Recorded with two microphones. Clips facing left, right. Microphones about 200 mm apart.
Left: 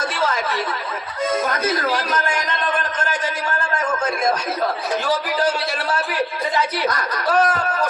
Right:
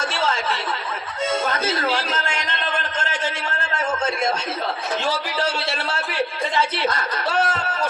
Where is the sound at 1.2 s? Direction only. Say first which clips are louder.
Left 2 dB; 25° right (ahead or behind).